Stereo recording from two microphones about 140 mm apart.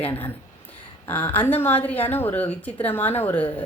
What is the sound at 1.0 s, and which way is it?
A woman's voice, 15° left (ahead or behind).